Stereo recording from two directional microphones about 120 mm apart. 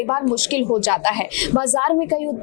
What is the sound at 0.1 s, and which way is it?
A woman's voice, 20° left (ahead or behind).